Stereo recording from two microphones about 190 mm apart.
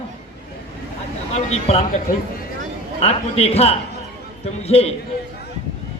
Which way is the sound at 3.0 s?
35° left (ahead or behind).